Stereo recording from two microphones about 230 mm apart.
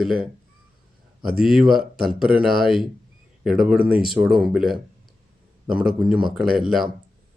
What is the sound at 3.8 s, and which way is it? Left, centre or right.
Speech, right.